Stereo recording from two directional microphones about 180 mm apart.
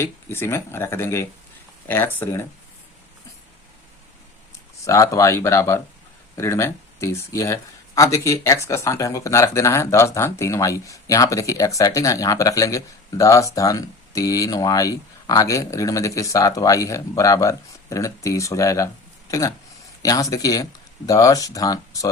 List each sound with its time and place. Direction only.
0.0 s speech: 15° left (ahead or behind)
4.9 s speech: 15° left (ahead or behind)